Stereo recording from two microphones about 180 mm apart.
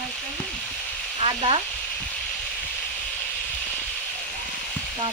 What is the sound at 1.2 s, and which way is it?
Frying, 30° right (ahead or behind).